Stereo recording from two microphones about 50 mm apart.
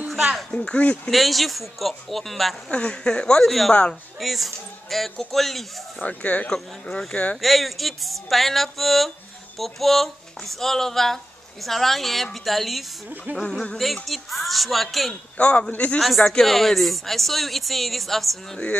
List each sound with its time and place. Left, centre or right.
0.1 s speech: centre
0.5 s speech: left
1.1 s speech: centre
2.7 s speech: centre
3.4 s speech: centre
5.9 s speech: left
6.5 s speech: centre
7.4 s speech: centre
14.0 s speech: centre
15.3 s a man's voice: left
16.0 s speech: centre